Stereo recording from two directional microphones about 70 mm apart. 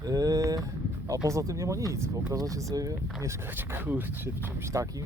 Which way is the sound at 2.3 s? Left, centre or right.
Right.